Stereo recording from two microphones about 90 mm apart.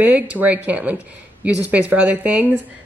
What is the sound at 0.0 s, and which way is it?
A woman's voice, 15° right (ahead or behind).